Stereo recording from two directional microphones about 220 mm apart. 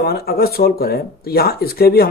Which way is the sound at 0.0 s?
45° left (ahead or behind).